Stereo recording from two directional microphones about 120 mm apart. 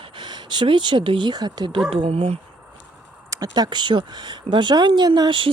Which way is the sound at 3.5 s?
40° right (ahead or behind).